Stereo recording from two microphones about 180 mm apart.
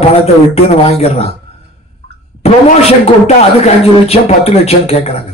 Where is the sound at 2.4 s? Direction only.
35° left (ahead or behind).